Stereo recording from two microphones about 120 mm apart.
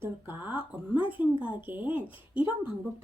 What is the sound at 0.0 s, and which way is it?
Speech, 20° right (ahead or behind).